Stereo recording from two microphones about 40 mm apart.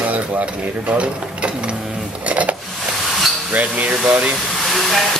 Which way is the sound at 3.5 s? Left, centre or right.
Right.